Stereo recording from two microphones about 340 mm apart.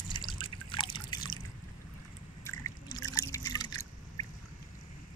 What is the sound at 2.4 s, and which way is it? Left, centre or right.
Trickle, centre.